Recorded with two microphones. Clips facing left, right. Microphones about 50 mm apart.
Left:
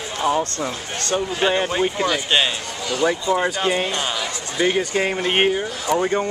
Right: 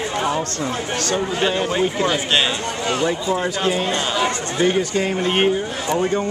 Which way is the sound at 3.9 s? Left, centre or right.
Right.